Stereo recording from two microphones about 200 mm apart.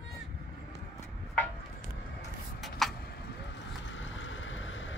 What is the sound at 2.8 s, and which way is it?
Vehicle, centre (ahead or behind).